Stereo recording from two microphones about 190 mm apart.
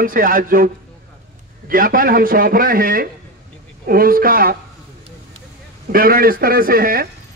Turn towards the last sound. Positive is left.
turn(degrees=-50)  # may be behind; listen again after turning